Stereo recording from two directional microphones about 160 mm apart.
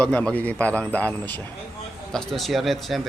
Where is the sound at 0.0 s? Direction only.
5° left (ahead or behind).